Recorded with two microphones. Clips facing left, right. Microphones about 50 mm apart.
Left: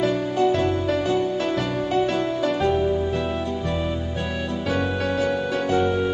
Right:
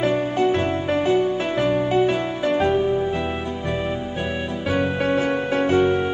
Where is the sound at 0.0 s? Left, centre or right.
Right.